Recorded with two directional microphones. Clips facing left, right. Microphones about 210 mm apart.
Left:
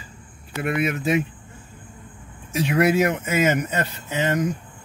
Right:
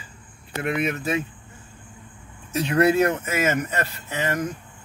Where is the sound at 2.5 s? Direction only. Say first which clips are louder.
Even; 10° left (ahead or behind).